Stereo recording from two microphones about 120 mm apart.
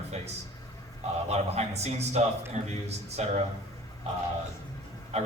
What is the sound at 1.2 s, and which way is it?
Speech, 60° right (ahead or behind).